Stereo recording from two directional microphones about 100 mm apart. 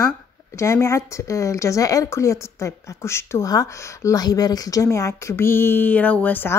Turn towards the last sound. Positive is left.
turn(degrees=20)  # may be behind; listen again after turning